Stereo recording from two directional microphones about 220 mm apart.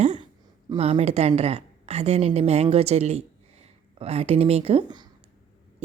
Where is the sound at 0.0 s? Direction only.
30° right (ahead or behind).